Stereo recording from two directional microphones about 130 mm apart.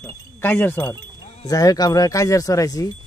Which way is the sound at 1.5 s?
30° left (ahead or behind).